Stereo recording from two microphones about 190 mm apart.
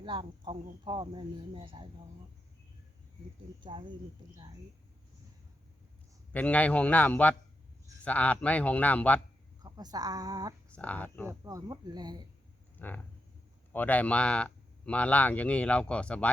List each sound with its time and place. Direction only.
0.0 s speech: 25° right (ahead or behind)
3.6 s speech: 25° right (ahead or behind)
6.3 s speech: 10° left (ahead or behind)
9.6 s speech: 20° right (ahead or behind)
10.7 s speech: 5° left (ahead or behind)
11.3 s speech: 15° right (ahead or behind)
12.8 s a sound: 10° left (ahead or behind)
13.7 s speech: 10° left (ahead or behind)